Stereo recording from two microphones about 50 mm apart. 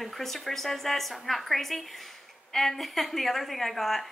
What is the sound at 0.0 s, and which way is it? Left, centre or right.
A woman's voice, centre.